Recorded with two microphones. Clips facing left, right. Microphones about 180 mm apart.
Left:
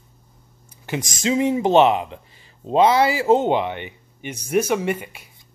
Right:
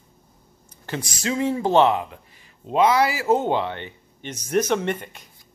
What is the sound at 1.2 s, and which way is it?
Speech, 20° left (ahead or behind).